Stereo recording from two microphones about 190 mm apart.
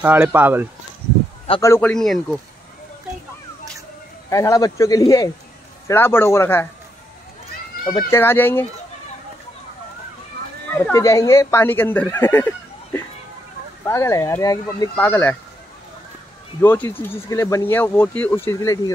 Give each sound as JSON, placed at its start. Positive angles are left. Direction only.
{"t": 0.0, "sound": "speech", "side_deg": -10}
{"t": 1.6, "sound": "speech", "side_deg": 10}
{"t": 4.3, "sound": "speech", "side_deg": 15}
{"t": 8.1, "sound": "speech", "side_deg": 10}
{"t": 10.7, "sound": "speech", "side_deg": 15}
{"t": 16.6, "sound": "speech", "side_deg": 10}